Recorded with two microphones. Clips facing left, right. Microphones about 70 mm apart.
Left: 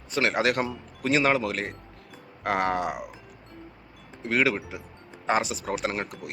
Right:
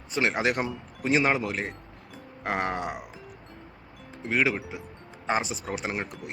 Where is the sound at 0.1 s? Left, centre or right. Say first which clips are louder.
Left 1 dB; centre.